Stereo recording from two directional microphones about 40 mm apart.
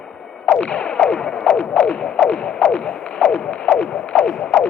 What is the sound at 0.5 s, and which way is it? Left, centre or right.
Music, left.